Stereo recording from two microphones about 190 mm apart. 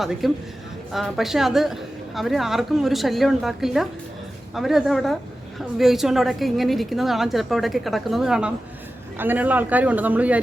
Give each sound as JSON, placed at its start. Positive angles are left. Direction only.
{"t": 0.0, "sound": "a woman's voice", "side_deg": 0}